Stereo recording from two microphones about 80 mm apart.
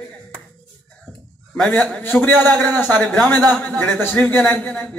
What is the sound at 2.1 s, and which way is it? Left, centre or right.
A man's voice, left.